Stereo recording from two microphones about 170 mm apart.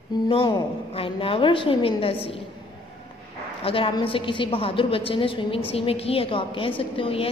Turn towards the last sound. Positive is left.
turn(degrees=35)  # may be behind; listen again after turning